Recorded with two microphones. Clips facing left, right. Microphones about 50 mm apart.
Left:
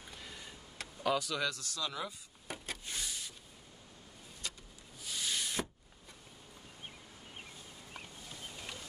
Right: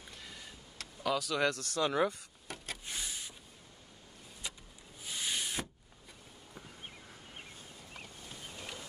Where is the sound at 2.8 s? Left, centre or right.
Centre.